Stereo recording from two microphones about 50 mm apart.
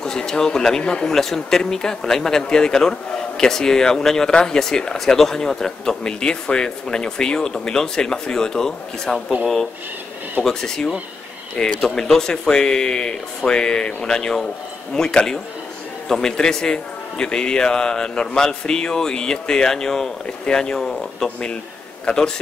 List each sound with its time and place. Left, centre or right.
0.0 s speech: centre
10.4 s a man's voice: centre